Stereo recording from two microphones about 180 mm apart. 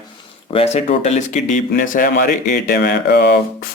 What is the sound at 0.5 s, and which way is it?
Speech, 35° left (ahead or behind).